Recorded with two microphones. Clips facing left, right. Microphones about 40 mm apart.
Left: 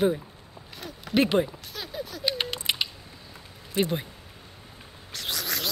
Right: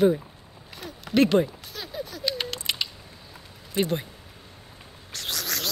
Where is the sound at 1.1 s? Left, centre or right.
Centre.